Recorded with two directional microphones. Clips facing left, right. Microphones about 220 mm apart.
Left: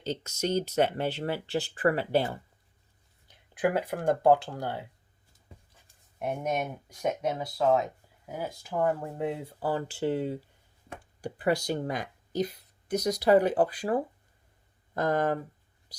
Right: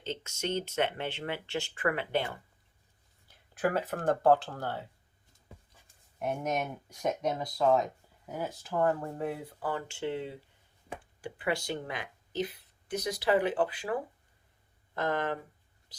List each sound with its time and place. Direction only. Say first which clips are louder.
0.0 s speech: left 4 dB; 40° left (ahead or behind)
3.2 s speech: left 3 dB; 15° left (ahead or behind)
6.1 s speech: left 2 dB; 10° left (ahead or behind); by 15.4 s 40° left (ahead or behind)